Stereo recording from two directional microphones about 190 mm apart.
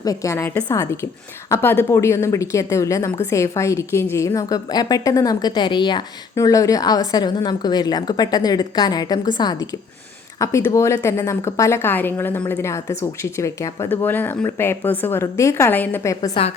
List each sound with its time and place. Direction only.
0.0 s a woman's voice: 20° left (ahead or behind)